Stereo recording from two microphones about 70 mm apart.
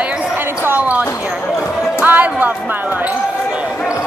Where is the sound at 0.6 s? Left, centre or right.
Right.